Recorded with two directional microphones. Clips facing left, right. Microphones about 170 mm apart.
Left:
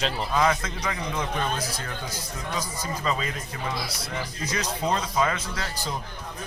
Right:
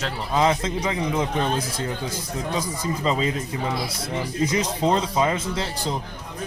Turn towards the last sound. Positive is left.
turn(degrees=-25)  # may be behind; listen again after turning